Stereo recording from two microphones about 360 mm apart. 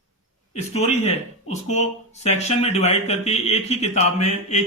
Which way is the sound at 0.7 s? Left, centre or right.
Centre.